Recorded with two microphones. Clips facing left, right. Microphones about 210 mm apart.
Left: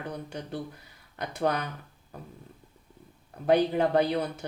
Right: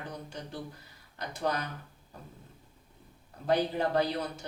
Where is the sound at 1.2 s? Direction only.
60° left (ahead or behind).